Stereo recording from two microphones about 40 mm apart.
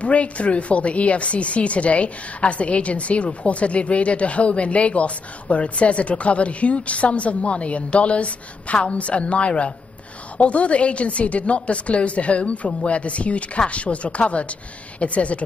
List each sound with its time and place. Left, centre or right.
0.0 s a woman's voice: left